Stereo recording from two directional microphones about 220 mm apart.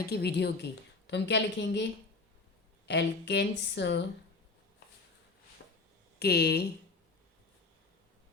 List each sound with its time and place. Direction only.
0.0 s a woman's voice: 45° left (ahead or behind)
6.1 s a woman's voice: 45° left (ahead or behind)